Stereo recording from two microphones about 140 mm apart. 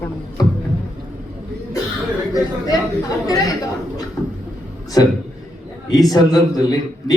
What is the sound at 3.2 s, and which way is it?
Speech, 25° left (ahead or behind).